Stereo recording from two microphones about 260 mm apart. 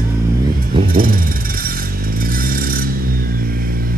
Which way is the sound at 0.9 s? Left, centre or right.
Right.